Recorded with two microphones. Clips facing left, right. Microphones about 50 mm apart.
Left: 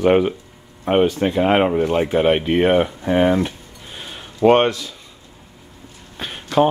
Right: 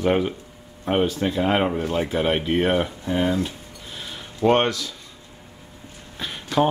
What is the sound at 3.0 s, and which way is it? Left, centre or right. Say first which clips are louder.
Speech: left 7 dB; left.